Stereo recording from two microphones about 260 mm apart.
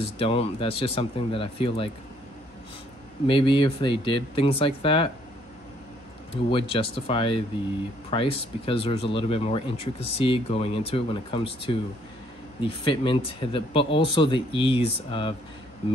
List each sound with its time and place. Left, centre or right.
0.0 s speech: left
3.3 s speech: centre
6.3 s speech: left